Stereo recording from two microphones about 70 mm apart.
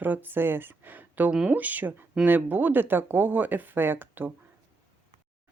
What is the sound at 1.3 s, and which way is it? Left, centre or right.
A woman's voice, centre.